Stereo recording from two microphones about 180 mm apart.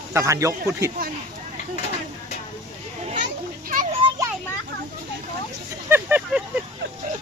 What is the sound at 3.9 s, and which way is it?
Children playing, 30° right (ahead or behind).